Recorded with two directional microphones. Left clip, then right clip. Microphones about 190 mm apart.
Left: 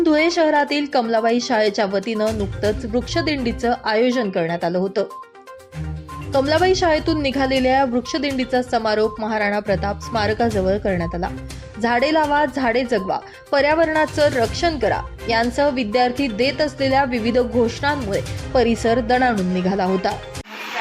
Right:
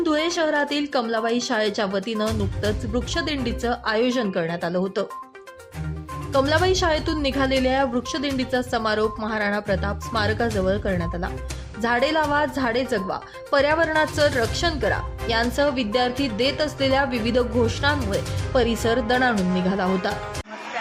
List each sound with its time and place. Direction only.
0.0 s speech: 15° left (ahead or behind)
6.3 s speech: 15° left (ahead or behind)